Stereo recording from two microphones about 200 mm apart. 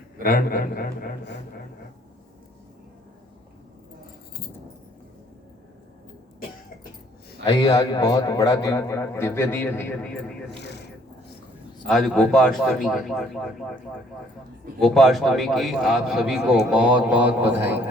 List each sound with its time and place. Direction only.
0.2 s a man's voice: 45° left (ahead or behind)
7.4 s a man's voice: 20° left (ahead or behind)
11.9 s a man's voice: centre (ahead or behind)
14.8 s a man's voice: centre (ahead or behind)